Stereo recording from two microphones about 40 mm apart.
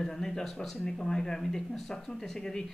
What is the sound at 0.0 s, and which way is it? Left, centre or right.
Speech, centre.